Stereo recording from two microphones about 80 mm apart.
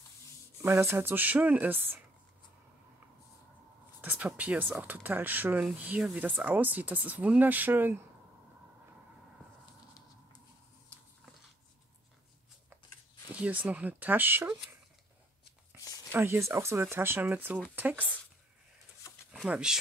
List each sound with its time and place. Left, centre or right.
0.6 s speech: right
4.0 s a sound: right
4.4 s speech: centre
13.3 s speech: centre
16.1 s speech: right
19.4 s speech: centre